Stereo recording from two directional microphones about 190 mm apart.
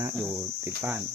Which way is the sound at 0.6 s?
10° right (ahead or behind).